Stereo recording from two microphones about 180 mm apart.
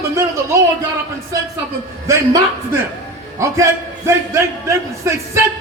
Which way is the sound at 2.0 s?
15° right (ahead or behind).